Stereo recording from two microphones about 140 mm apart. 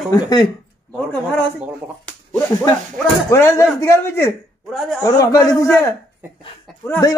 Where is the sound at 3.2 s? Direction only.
20° left (ahead or behind).